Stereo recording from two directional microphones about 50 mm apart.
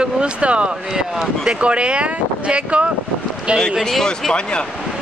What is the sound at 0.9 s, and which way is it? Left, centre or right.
Speech, centre.